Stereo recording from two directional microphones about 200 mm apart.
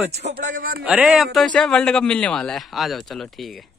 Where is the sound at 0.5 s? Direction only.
45° right (ahead or behind).